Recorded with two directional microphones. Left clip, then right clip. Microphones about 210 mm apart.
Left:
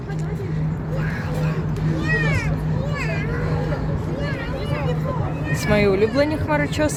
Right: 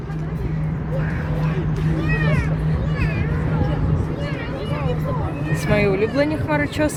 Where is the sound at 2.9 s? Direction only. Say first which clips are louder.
Left 2 dB; 45° left (ahead or behind).